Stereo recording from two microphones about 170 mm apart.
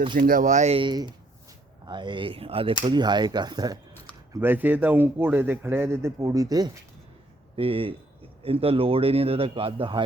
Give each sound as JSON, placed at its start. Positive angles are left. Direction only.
{"t": 0.2, "sound": "speech", "side_deg": -55}
{"t": 4.3, "sound": "a man's voice", "side_deg": -10}
{"t": 7.5, "sound": "speech", "side_deg": -35}